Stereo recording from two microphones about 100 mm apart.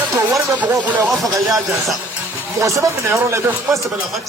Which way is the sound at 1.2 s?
35° right (ahead or behind).